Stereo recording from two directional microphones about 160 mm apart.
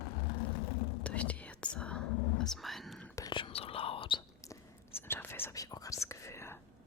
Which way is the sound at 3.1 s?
25° left (ahead or behind).